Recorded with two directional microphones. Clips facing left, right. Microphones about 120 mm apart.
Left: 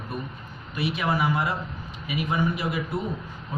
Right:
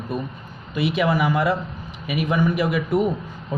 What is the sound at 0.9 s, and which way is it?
Speech, 90° right.